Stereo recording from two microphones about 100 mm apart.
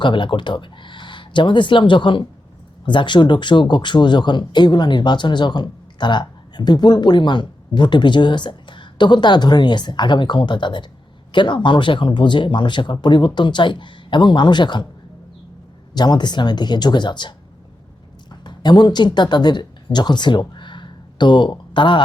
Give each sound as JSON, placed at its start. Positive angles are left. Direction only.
{"t": 0.0, "sound": "speech", "side_deg": 55}
{"t": 16.0, "sound": "speech", "side_deg": 45}